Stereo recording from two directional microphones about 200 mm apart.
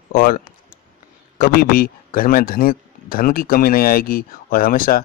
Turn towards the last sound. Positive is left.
turn(degrees=45)  # may be behind; listen again after turning